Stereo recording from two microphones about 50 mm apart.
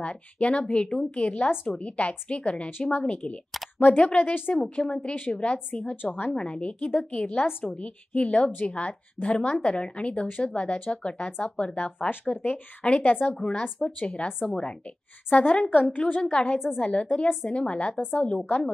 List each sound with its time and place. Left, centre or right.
0.0 s a woman's voice: left
5.9 s speech: left
6.3 s a woman's voice: left
12.8 s speech: left
13.3 s a woman's voice: centre
16.0 s a woman's voice: left